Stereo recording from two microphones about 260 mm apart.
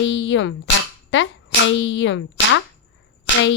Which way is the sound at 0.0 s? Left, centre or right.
Left.